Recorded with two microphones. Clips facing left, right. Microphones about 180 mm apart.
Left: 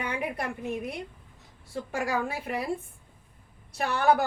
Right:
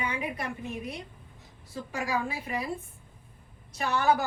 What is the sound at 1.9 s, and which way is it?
Speech, 55° left (ahead or behind).